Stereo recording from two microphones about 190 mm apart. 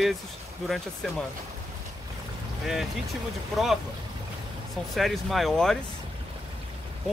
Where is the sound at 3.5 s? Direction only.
Centre (ahead or behind).